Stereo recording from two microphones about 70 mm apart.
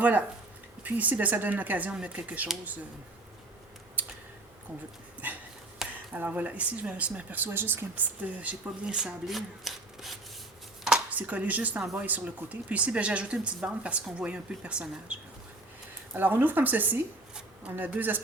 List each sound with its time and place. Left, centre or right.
0.0 s speech: right
5.8 s a sound: centre
6.1 s speech: right; by 10.2 s centre
11.1 s speech: right
16.1 s speech: right